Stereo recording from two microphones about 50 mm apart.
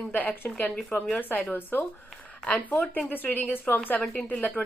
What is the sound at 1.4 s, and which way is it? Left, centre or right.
Speech, left.